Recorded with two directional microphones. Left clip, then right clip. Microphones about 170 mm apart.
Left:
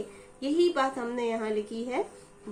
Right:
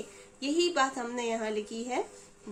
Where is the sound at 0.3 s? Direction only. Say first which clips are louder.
Left 2 dB; 35° right (ahead or behind).